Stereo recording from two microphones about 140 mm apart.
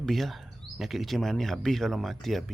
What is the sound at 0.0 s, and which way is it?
Speech, centre (ahead or behind).